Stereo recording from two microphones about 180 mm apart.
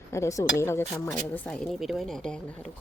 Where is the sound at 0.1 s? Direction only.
15° left (ahead or behind).